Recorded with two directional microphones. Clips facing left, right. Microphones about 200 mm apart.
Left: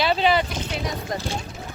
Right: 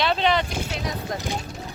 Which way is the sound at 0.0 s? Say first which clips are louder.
Left 2 dB; 5° left (ahead or behind).